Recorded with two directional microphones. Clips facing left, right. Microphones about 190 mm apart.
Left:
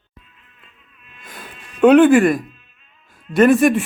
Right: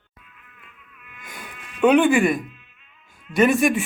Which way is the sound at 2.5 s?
35° left (ahead or behind).